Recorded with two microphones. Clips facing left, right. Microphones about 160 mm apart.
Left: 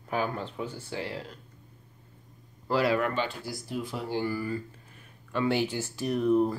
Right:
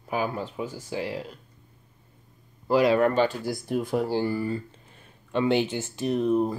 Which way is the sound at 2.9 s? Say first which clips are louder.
Right 7 dB; 40° right (ahead or behind).